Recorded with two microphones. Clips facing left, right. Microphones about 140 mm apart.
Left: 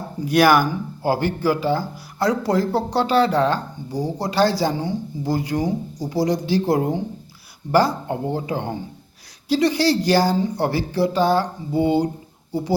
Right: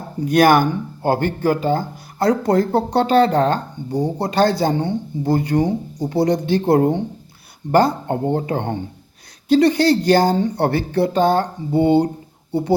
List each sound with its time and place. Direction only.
0.3 s speech: 50° right (ahead or behind)